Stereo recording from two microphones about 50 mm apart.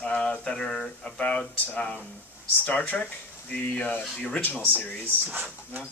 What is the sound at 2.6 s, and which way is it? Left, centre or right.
Speech, left.